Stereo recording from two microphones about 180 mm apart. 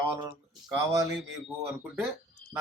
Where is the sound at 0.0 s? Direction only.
25° right (ahead or behind).